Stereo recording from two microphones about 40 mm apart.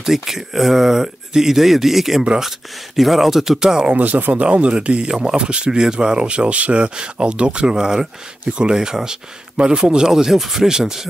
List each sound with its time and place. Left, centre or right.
0.0 s speech: centre
3.9 s speech: right
5.0 s speech: centre